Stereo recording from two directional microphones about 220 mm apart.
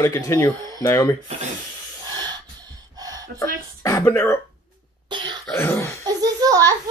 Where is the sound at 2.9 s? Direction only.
15° right (ahead or behind).